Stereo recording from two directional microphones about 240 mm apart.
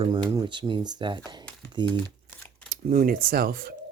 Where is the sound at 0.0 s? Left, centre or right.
Centre.